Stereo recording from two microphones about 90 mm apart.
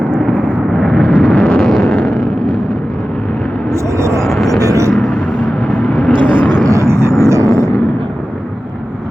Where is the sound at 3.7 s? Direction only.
35° right (ahead or behind).